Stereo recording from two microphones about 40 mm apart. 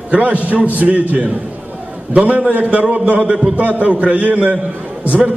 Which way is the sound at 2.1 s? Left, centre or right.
Right.